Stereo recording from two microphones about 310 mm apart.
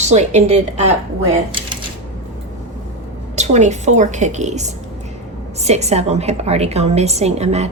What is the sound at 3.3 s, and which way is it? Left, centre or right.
A woman's voice, right.